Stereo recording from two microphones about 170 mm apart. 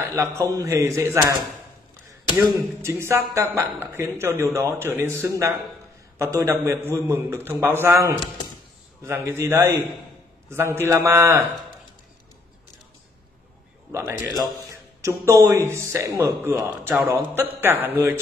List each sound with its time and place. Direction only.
0.1 s a man's voice: 15° right (ahead or behind)
2.3 s a man's voice: 15° right (ahead or behind)
13.9 s a man's voice: 15° right (ahead or behind)